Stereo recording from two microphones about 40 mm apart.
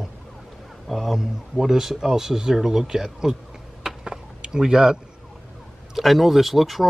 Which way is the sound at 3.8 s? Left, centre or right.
Centre.